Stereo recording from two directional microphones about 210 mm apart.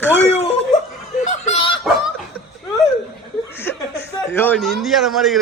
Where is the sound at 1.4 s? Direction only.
30° left (ahead or behind).